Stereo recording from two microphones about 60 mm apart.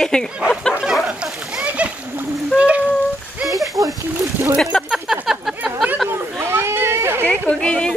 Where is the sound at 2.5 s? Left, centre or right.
Right.